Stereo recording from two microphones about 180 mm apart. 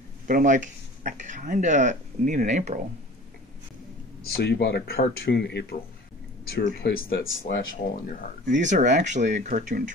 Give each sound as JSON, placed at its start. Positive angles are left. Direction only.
{"t": 0.3, "sound": "speech", "side_deg": -45}
{"t": 4.2, "sound": "speech", "side_deg": 65}
{"t": 7.5, "sound": "speech", "side_deg": 50}
{"t": 8.5, "sound": "speech", "side_deg": -40}